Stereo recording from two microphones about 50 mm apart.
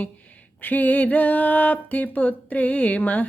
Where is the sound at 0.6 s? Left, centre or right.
Left.